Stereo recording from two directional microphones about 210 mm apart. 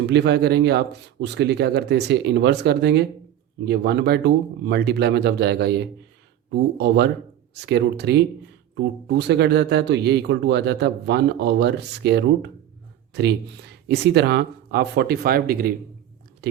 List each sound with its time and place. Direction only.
0.1 s speech: 50° right (ahead or behind)